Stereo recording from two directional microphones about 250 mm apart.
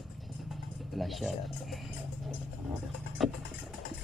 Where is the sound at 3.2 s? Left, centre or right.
Centre.